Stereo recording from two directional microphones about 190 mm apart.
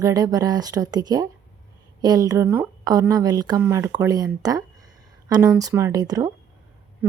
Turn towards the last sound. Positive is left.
turn(degrees=-20)  # may be behind; listen again after turning